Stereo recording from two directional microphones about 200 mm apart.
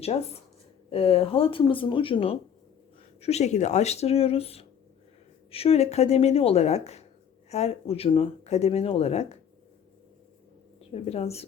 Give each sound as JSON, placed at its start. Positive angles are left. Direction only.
{"t": 0.9, "sound": "speech", "side_deg": 30}
{"t": 10.8, "sound": "a woman's voice", "side_deg": 30}